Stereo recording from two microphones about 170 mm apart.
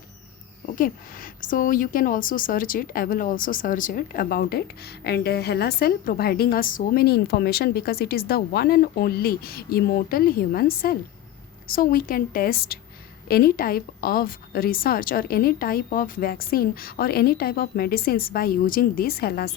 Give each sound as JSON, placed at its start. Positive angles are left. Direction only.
{"t": 0.8, "sound": "a woman's voice", "side_deg": 55}